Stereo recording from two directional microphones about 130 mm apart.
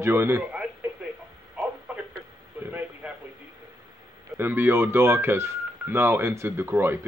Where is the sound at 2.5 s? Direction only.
15° right (ahead or behind).